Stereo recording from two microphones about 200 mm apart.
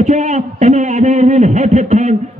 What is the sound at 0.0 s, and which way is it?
A man's voice, 35° right (ahead or behind).